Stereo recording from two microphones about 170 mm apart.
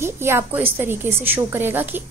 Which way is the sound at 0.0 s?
15° right (ahead or behind).